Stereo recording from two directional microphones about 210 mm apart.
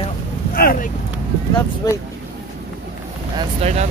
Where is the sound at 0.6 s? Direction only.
45° left (ahead or behind).